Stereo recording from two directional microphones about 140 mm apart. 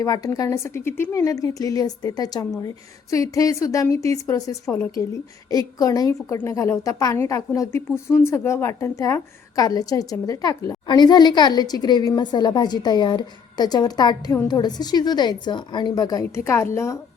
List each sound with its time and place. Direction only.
0.0 s a woman's voice: 25° left (ahead or behind)